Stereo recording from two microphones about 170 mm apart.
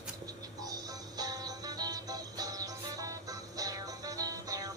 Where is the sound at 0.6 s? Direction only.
20° right (ahead or behind).